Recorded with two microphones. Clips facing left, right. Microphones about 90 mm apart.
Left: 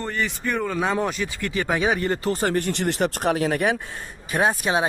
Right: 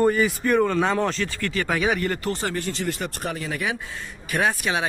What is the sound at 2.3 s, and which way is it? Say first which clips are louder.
Speech: left 4 dB; 40° left (ahead or behind).